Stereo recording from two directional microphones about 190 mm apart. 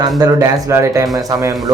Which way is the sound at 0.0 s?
20° right (ahead or behind).